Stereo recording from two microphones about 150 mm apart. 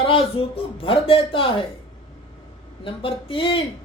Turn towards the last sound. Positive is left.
turn(degrees=35)  # may be behind; listen again after turning